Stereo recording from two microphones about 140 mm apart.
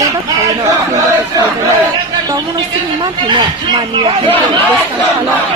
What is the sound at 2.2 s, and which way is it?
A woman's voice, 25° right (ahead or behind).